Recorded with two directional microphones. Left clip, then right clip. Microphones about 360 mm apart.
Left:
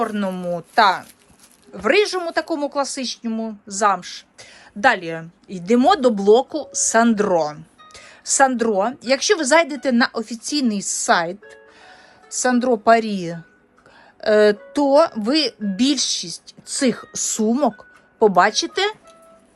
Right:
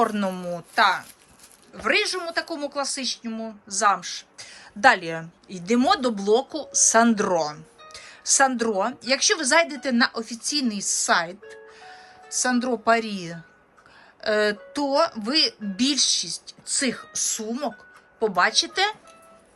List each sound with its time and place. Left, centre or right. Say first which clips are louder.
0.0 s a woman's voice: left 1 dB; centre